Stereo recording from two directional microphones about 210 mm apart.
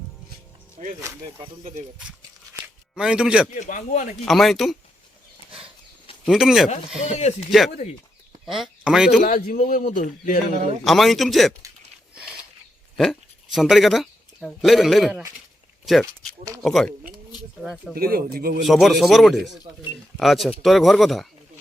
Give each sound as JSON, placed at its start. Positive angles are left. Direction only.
{"t": 0.8, "sound": "speech", "side_deg": -35}
{"t": 2.0, "sound": "a sound", "side_deg": -5}
{"t": 3.5, "sound": "a man's voice", "side_deg": 35}
{"t": 4.3, "sound": "speech", "side_deg": 0}
{"t": 6.2, "sound": "speech", "side_deg": 0}
{"t": 7.1, "sound": "a man's voice", "side_deg": 30}
{"t": 8.4, "sound": "speech", "side_deg": 0}
{"t": 9.2, "sound": "a man's voice", "side_deg": 40}
{"t": 10.8, "sound": "speech", "side_deg": 0}
{"t": 13.0, "sound": "speech", "side_deg": 0}
{"t": 16.6, "sound": "speech", "side_deg": 0}
{"t": 17.9, "sound": "speech", "side_deg": -45}
{"t": 18.6, "sound": "speech", "side_deg": 0}